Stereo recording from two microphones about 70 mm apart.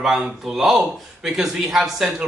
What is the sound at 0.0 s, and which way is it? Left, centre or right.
Speech, centre.